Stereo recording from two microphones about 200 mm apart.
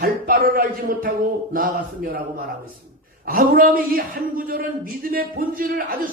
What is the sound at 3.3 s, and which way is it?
A man's voice, 45° right (ahead or behind).